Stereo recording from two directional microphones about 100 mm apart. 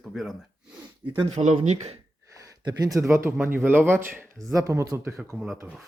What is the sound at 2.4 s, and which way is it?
A man's voice, 35° right (ahead or behind).